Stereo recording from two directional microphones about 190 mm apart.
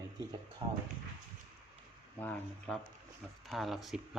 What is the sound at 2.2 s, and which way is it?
Speech, 10° left (ahead or behind).